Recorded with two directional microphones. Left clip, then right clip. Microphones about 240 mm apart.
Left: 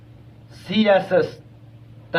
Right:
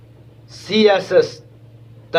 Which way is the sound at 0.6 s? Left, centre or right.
Centre.